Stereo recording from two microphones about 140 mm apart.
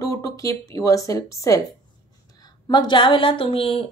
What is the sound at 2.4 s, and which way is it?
Speech, 35° left (ahead or behind).